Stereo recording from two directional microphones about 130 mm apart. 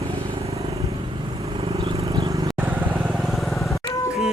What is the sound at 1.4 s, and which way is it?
Vehicle, 50° right (ahead or behind).